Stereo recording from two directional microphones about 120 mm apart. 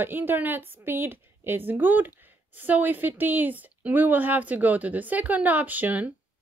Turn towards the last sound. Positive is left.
turn(degrees=-15)  # may be behind; listen again after turning